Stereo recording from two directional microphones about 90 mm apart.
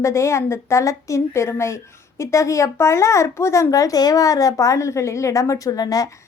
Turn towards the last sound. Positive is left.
turn(degrees=40)  # may be behind; listen again after turning